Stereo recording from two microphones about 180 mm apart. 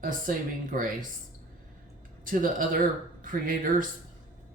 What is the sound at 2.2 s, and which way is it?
Speech, 50° right (ahead or behind).